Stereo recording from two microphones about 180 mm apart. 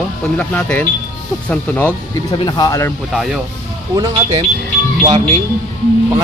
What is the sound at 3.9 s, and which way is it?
Speech, 25° right (ahead or behind).